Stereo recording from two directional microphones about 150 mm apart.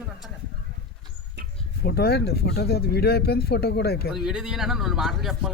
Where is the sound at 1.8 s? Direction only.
90° left.